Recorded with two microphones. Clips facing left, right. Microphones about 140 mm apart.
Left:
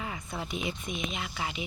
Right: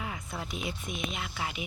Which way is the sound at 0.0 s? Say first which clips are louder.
Left 1 dB; centre (ahead or behind).